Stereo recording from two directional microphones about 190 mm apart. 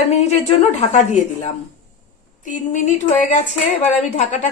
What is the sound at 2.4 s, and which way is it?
A woman's voice, 40° left (ahead or behind).